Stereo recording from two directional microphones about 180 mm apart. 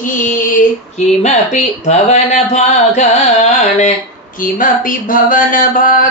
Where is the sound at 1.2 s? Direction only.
40° left (ahead or behind).